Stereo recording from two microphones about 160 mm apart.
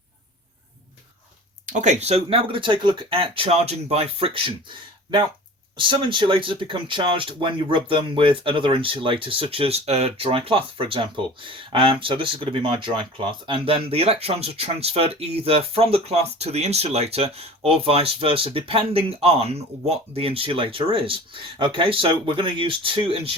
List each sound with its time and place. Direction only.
1.6 s speech: 50° right (ahead or behind)
5.7 s speech: 30° right (ahead or behind)